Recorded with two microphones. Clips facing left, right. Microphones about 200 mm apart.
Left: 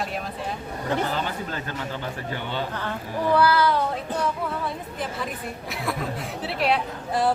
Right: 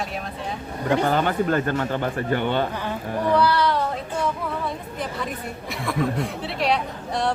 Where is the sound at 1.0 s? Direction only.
55° right (ahead or behind).